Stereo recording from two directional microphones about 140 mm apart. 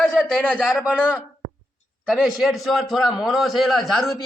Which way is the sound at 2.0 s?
Centre (ahead or behind).